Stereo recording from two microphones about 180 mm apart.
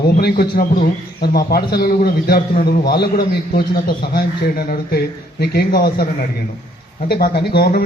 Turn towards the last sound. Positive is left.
turn(degrees=60)  # may be behind; listen again after turning